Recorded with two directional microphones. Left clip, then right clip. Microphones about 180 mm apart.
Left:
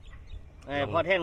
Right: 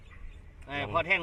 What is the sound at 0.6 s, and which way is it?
Speech, 55° left (ahead or behind).